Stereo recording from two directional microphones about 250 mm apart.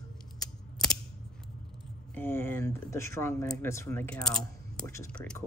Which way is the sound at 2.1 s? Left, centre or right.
Centre.